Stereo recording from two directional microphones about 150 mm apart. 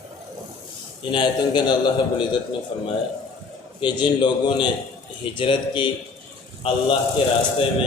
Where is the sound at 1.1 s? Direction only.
30° left (ahead or behind).